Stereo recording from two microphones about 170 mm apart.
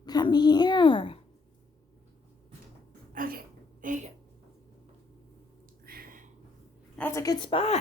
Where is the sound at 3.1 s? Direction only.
60° right (ahead or behind).